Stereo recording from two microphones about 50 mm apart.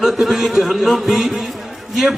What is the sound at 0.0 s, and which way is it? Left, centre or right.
A man's voice, centre.